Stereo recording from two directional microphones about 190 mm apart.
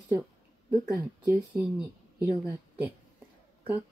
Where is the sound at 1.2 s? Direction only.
10° right (ahead or behind).